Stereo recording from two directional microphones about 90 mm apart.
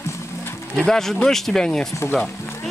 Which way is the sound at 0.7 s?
5° left (ahead or behind).